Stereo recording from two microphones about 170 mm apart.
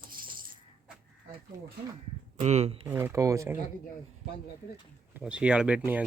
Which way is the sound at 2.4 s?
40° right (ahead or behind).